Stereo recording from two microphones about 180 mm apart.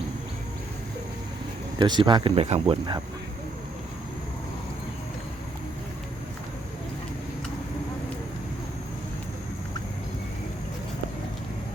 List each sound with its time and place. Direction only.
1.8 s speech: 25° right (ahead or behind)